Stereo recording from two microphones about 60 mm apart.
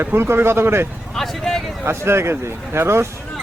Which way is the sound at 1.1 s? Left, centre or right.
Centre.